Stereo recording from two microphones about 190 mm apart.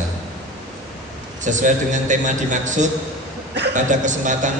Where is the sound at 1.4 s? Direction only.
40° right (ahead or behind).